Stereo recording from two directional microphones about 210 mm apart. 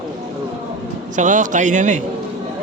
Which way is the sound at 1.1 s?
35° right (ahead or behind).